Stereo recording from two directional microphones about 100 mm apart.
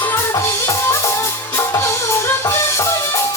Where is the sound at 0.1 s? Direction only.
30° left (ahead or behind).